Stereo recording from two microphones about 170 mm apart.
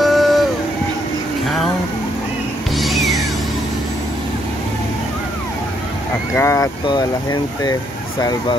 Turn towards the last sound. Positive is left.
turn(degrees=25)  # may be behind; listen again after turning